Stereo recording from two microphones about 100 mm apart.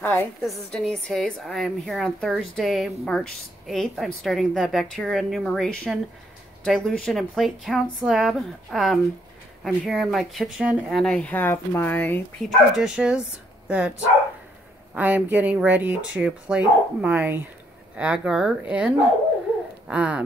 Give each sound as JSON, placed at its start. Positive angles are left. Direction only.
{"t": 0.0, "sound": "a woman's voice", "side_deg": 20}
{"t": 0.7, "sound": "a woman's voice", "side_deg": 10}
{"t": 11.1, "sound": "speech", "side_deg": 10}
{"t": 12.4, "sound": "speech", "side_deg": 0}
{"t": 15.0, "sound": "speech", "side_deg": -15}